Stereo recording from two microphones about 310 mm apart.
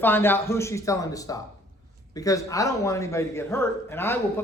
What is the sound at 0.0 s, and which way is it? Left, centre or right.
A man's voice, centre.